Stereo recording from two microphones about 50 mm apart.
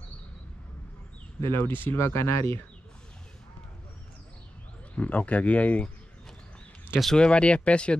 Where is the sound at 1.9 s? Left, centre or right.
Left.